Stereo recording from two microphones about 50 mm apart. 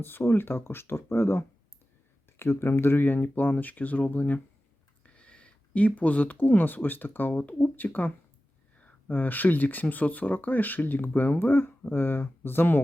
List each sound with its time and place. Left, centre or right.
0.0 s speech: left
5.0 s speech: left